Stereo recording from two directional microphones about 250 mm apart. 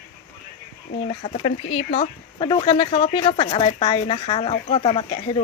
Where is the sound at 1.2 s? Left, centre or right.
Left.